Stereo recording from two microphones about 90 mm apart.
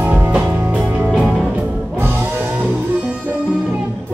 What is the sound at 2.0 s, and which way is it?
Music, 25° right (ahead or behind).